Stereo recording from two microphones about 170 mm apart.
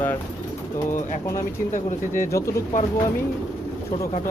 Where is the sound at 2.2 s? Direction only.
15° left (ahead or behind).